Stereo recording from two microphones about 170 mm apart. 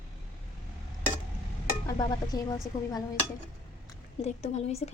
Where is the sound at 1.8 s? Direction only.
20° left (ahead or behind).